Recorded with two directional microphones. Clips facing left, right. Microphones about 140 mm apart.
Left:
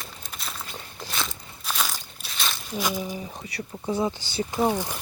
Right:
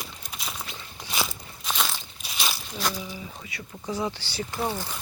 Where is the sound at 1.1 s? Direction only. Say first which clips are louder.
Right 3 dB; 5° right (ahead or behind).